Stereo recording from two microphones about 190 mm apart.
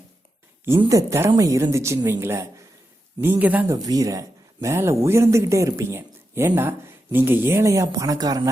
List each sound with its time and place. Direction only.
0.8 s speech: 15° right (ahead or behind)
3.8 s speech: 20° right (ahead or behind)